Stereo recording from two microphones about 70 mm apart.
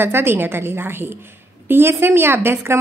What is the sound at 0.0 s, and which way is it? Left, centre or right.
A woman's voice, right.